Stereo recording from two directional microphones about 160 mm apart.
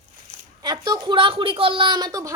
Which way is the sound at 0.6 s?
25° right (ahead or behind).